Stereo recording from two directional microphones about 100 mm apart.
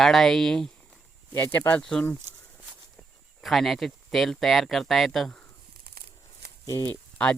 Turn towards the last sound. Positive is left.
turn(degrees=10)  # may be behind; listen again after turning